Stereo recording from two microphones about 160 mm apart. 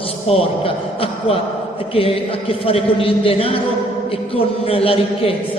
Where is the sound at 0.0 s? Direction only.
35° left (ahead or behind).